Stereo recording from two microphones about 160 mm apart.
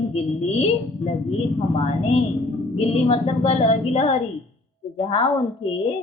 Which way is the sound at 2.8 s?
40° left (ahead or behind).